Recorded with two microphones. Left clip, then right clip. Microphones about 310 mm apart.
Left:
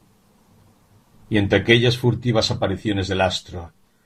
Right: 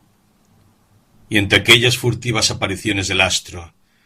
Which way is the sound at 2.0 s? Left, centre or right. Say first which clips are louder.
Right 2 dB; right.